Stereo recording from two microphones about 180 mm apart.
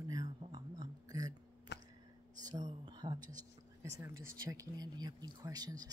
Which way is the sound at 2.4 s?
25° right (ahead or behind).